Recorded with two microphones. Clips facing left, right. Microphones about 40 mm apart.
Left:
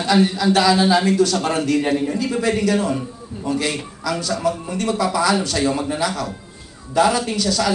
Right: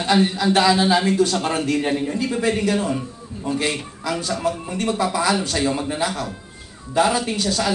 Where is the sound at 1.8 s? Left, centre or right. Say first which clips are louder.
Left 2 dB; centre.